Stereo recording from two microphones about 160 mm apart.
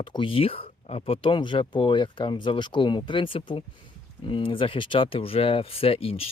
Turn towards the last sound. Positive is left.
turn(degrees=35)  # may be behind; listen again after turning